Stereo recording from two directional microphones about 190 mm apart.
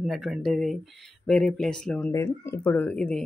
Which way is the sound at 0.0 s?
Centre (ahead or behind).